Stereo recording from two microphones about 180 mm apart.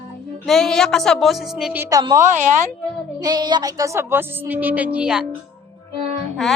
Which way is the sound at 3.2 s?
25° right (ahead or behind).